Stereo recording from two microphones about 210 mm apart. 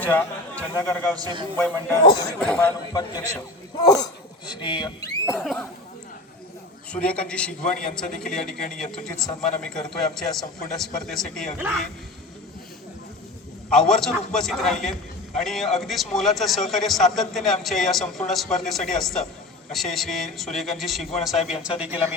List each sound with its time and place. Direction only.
0.0 s a man's voice: 10° left (ahead or behind)
1.1 s a man's voice: 20° right (ahead or behind)
2.0 s speech: 20° left (ahead or behind)
2.4 s a man's voice: 5° left (ahead or behind)
2.9 s a man's voice: 15° left (ahead or behind)
5.4 s a man's voice: centre (ahead or behind)
6.9 s a man's voice: 5° left (ahead or behind)
13.7 s a man's voice: 5° left (ahead or behind)